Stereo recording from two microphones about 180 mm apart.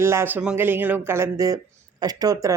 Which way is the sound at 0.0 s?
15° right (ahead or behind).